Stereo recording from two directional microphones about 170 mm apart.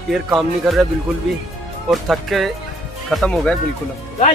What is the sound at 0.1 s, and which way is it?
Speech, centre (ahead or behind).